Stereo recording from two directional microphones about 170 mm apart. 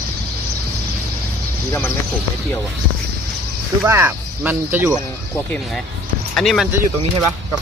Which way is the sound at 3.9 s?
15° right (ahead or behind).